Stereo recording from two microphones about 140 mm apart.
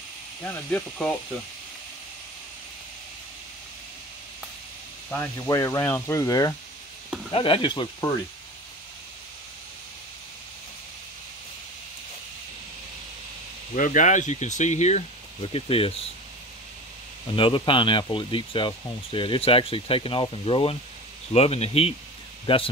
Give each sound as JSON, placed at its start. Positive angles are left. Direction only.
{"t": 0.4, "sound": "speech", "side_deg": 15}
{"t": 5.1, "sound": "speech", "side_deg": 20}
{"t": 7.3, "sound": "speech", "side_deg": 40}
{"t": 13.7, "sound": "speech", "side_deg": 65}
{"t": 17.4, "sound": "speech", "side_deg": 35}